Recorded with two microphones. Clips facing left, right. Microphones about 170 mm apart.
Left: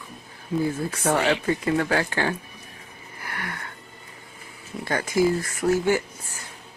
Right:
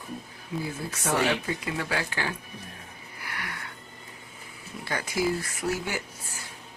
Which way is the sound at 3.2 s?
50° left (ahead or behind).